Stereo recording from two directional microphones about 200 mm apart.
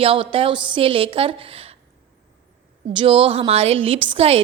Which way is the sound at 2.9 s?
30° right (ahead or behind).